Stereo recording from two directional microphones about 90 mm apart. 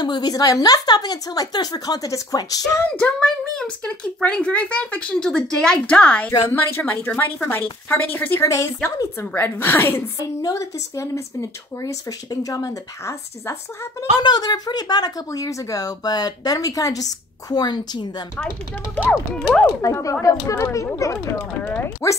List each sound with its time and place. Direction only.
0.0 s speech: 50° left (ahead or behind)
3.0 s speech: 15° left (ahead or behind)
6.5 s a woman's voice: 25° left (ahead or behind)
14.2 s speech: 50° left (ahead or behind)
19.3 s speech: 10° left (ahead or behind)
19.8 s speech: 35° left (ahead or behind)